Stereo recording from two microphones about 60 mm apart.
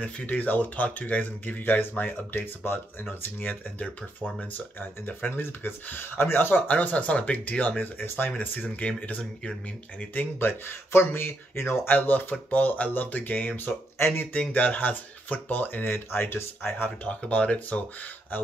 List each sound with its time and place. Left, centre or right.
0.0 s speech: left
10.1 s speech: left
13.9 s speech: left
14.5 s speech: left